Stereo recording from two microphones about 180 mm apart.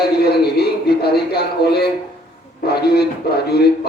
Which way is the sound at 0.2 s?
60° left (ahead or behind).